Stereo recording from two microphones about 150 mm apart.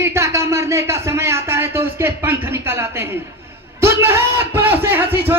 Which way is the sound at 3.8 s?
15° right (ahead or behind).